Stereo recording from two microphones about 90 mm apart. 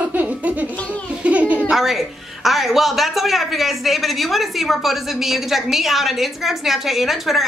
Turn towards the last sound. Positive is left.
turn(degrees=0)  # may be behind; listen again after turning